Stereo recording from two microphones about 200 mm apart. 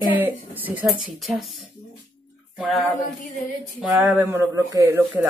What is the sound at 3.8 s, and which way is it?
Speech, 5° right (ahead or behind).